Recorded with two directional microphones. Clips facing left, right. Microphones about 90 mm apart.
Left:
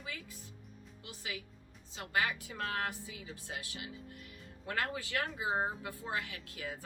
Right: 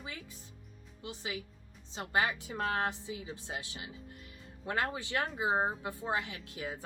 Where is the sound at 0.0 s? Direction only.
30° right (ahead or behind).